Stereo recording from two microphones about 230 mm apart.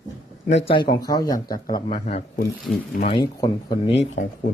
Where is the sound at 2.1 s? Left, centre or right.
Left.